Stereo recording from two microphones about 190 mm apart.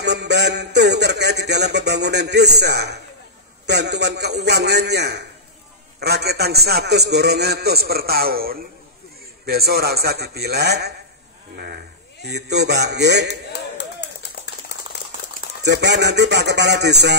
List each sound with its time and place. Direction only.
0.0 s a man's voice: 60° right (ahead or behind)
13.3 s a sound: 60° left (ahead or behind)
15.6 s a man's voice: 65° right (ahead or behind)